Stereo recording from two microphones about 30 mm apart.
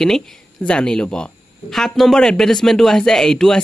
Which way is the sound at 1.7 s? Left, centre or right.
Centre.